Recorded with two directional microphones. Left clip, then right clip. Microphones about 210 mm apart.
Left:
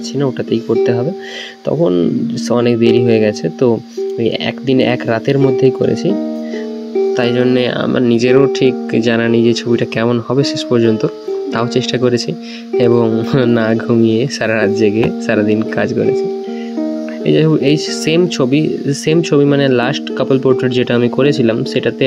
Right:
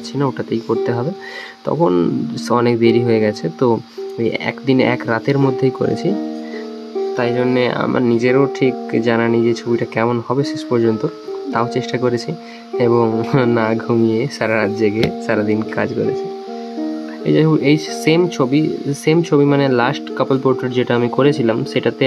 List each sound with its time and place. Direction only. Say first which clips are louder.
0.2 s speech: left 3 dB; 10° left (ahead or behind)
7.2 s speech: left 1 dB; 20° left (ahead or behind)
17.3 s speech: left 2 dB; 15° left (ahead or behind)